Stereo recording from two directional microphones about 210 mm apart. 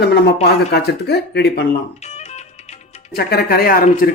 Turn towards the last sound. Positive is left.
turn(degrees=45)  # may be behind; listen again after turning